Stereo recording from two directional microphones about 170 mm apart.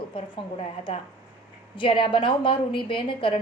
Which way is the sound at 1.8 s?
30° left (ahead or behind).